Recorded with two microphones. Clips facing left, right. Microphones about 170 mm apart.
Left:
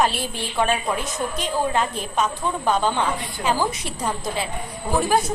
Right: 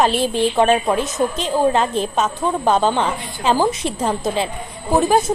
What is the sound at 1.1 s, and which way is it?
A woman's voice, 25° right (ahead or behind).